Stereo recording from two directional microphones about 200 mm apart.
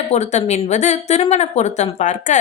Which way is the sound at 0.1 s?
35° left (ahead or behind).